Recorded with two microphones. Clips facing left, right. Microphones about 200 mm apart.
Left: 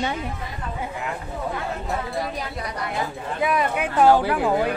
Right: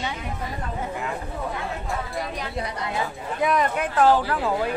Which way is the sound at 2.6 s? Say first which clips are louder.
Right 1 dB; 25° right (ahead or behind).